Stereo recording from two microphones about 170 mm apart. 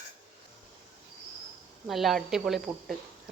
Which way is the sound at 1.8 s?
Centre (ahead or behind).